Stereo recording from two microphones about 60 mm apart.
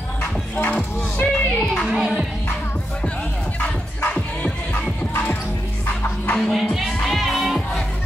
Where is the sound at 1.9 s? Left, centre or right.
Centre.